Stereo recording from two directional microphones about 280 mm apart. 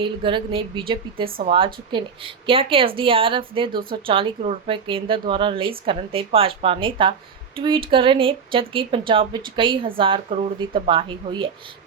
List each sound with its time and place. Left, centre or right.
0.0 s speech: centre